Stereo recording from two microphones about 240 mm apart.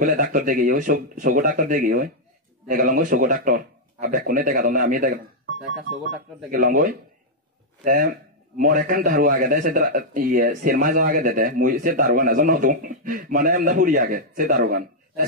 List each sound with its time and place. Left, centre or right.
0.0 s a man's voice: right
6.5 s a man's voice: right